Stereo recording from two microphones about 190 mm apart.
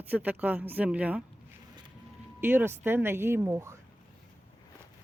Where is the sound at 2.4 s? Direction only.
10° right (ahead or behind).